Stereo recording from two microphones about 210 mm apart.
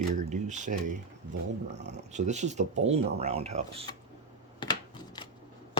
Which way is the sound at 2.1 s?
35° right (ahead or behind).